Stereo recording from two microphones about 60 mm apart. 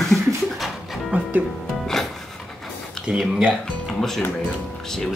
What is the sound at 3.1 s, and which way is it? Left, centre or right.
Speech, centre.